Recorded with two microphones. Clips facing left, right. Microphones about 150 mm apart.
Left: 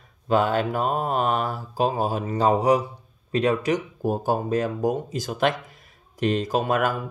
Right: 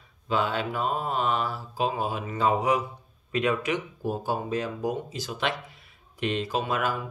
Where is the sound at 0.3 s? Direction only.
45° left (ahead or behind).